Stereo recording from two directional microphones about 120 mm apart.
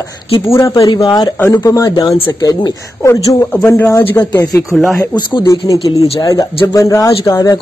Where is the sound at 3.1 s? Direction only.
15° left (ahead or behind).